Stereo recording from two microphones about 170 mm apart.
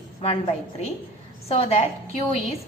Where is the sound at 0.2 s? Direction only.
35° left (ahead or behind).